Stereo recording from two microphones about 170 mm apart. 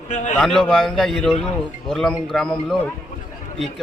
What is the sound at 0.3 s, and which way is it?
A man's voice, 5° left (ahead or behind).